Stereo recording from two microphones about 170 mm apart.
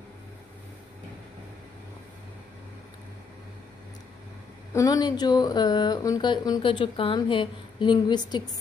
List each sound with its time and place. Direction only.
4.7 s speech: 20° left (ahead or behind)